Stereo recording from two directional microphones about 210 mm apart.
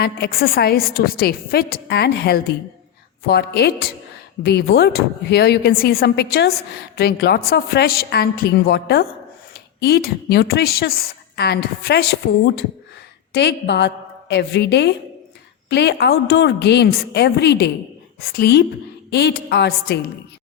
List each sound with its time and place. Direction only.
0.0 s a woman's voice: 45° left (ahead or behind)